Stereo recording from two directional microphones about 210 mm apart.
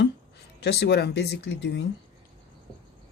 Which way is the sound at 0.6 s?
55° left (ahead or behind).